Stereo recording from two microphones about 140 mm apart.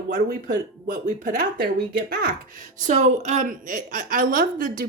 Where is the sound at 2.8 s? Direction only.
60° right (ahead or behind).